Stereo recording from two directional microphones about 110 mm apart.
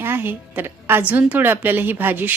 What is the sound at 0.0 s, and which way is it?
A woman's voice, 20° right (ahead or behind).